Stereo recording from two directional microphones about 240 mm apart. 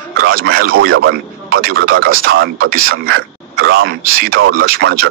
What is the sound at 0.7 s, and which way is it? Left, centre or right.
Speech, right.